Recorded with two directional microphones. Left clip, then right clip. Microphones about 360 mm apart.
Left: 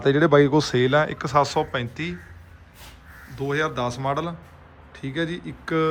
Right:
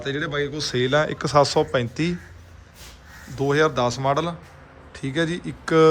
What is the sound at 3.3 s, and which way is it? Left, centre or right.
A man's voice, centre.